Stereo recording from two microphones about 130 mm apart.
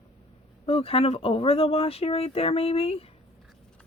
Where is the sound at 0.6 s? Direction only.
45° left (ahead or behind).